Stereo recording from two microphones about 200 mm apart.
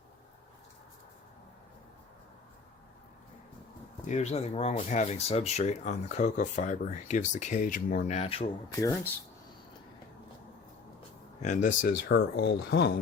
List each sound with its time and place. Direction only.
4.0 s speech: 35° left (ahead or behind)
8.8 s speech: 15° left (ahead or behind)
11.4 s speech: 40° left (ahead or behind); by 12.9 s 55° left (ahead or behind)